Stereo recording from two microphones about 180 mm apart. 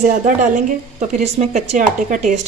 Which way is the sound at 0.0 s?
45° right (ahead or behind).